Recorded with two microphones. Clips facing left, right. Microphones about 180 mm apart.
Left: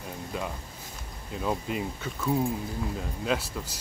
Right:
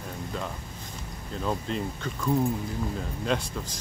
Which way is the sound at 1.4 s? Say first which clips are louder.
Even; 10° left (ahead or behind).